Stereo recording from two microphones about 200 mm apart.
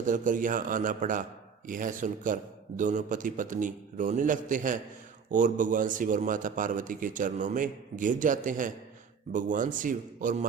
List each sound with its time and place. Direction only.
0.0 s a man's voice: 40° right (ahead or behind)